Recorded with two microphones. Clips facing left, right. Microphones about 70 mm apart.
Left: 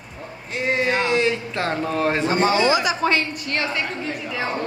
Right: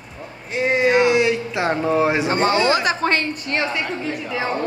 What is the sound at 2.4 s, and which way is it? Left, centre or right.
Speech, right.